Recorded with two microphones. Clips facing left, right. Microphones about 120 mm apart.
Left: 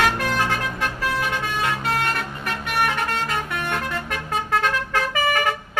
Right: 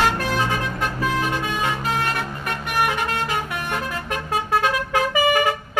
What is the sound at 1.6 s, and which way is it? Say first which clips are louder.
Vehicle: even; centre (ahead or behind).